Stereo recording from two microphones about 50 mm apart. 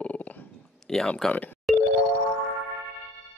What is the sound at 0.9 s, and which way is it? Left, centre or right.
Speech, centre.